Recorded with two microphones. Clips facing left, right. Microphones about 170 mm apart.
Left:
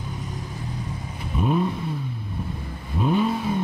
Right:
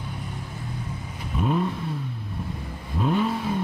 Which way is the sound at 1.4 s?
5° left (ahead or behind).